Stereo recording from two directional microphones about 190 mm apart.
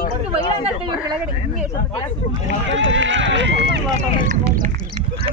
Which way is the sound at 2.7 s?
80° right.